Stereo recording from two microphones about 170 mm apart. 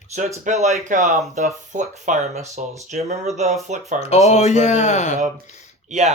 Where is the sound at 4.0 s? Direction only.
40° left (ahead or behind).